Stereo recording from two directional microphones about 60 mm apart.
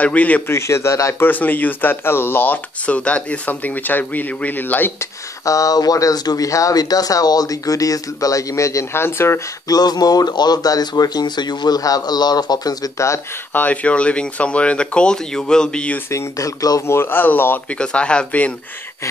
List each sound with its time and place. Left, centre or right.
0.0 s speech: left
0.5 s a man's voice: left
1.2 s speech: left
3.0 s speech: left
5.4 s speech: left
8.9 s a man's voice: left
9.7 s speech: left
13.5 s speech: left
16.1 s speech: left
16.8 s speech: left
17.7 s speech: centre